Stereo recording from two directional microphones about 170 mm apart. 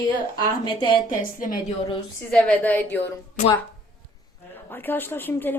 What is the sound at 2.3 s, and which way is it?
Speech, 5° left (ahead or behind).